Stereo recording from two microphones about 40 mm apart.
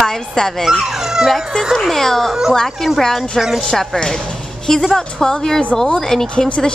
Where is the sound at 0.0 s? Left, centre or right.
Centre.